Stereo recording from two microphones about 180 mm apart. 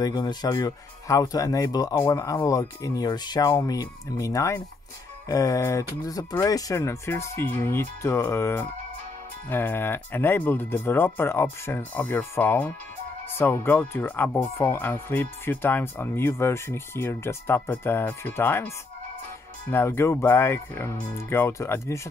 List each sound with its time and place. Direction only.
0.0 s speech: 25° left (ahead or behind)
19.7 s speech: 15° left (ahead or behind)